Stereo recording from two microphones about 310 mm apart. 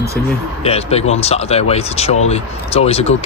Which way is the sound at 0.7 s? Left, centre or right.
Centre.